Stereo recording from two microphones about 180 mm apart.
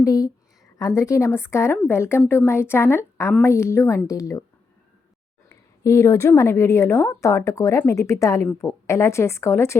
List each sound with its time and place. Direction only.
0.0 s a woman's voice: 20° left (ahead or behind)
5.5 s a woman's voice: 15° left (ahead or behind)